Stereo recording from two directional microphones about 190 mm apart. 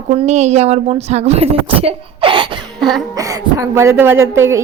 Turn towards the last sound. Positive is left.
turn(degrees=-15)  # may be behind; listen again after turning